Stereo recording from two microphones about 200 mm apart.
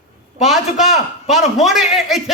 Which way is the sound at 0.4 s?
Centre (ahead or behind).